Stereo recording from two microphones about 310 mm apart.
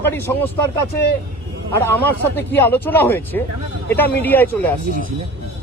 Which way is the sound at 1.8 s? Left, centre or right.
Centre.